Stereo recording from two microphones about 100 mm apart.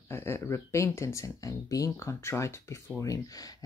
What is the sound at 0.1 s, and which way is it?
Speech, 25° left (ahead or behind).